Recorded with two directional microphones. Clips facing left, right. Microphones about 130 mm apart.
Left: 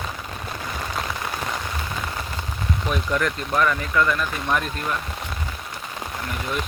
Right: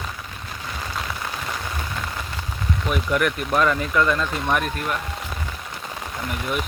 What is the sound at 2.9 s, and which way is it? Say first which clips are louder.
Speech: right 2 dB; 10° right (ahead or behind).